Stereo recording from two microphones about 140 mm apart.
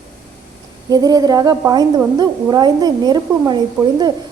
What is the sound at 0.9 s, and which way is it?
A woman's voice, 25° right (ahead or behind).